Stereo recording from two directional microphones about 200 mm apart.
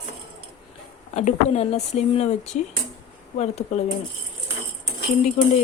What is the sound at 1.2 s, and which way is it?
A woman's voice, 35° left (ahead or behind).